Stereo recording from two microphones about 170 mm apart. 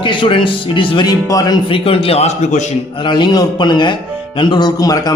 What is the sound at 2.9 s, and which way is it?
A man's voice, 25° left (ahead or behind).